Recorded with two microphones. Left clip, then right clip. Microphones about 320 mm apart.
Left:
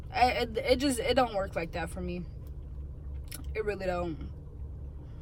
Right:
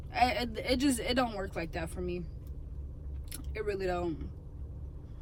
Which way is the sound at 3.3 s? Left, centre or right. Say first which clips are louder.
Left 2 dB; centre.